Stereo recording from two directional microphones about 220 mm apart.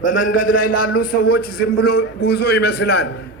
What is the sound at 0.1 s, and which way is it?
A man's voice, 35° left (ahead or behind).